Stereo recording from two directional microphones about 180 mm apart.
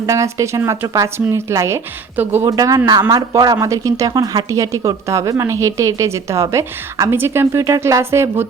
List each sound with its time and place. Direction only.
0.0 s speech: 15° right (ahead or behind)